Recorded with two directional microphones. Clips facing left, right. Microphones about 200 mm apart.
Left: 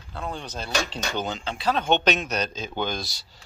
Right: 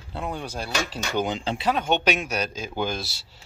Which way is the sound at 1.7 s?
10° right (ahead or behind).